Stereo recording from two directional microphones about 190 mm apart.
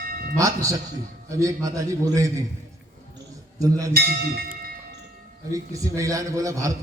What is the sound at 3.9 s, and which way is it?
Speech, 50° right (ahead or behind).